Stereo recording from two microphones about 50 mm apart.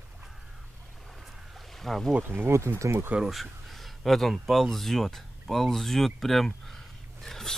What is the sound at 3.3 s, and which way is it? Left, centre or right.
Speech, centre.